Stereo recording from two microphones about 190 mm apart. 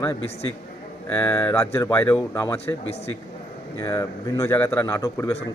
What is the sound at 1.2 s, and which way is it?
A man's voice, 15° left (ahead or behind).